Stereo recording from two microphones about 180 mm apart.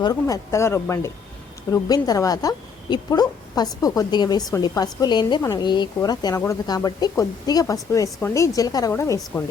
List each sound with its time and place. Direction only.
0.0 s a woman's voice: 20° left (ahead or behind)